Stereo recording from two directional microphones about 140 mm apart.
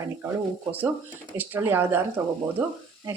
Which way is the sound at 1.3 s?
15° right (ahead or behind).